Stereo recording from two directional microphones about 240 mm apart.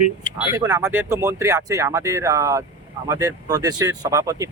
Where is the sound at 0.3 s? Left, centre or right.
Centre.